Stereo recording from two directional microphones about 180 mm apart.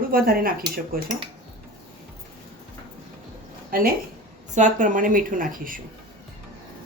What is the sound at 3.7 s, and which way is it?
A woman's voice, 55° right (ahead or behind).